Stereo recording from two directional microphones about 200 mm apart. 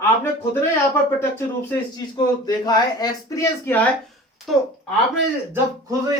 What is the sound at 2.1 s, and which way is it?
Speech, 20° left (ahead or behind).